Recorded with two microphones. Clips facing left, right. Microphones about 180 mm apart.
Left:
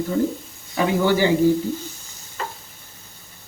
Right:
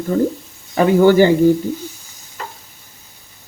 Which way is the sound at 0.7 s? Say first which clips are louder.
Right 8 dB; 50° right (ahead or behind).